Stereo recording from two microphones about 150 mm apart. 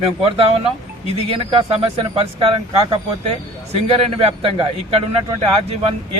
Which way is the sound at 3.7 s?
40° right (ahead or behind).